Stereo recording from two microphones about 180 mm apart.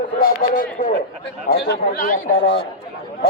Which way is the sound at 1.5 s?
65° left (ahead or behind).